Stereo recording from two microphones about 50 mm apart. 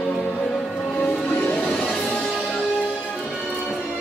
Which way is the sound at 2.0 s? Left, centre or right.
Left.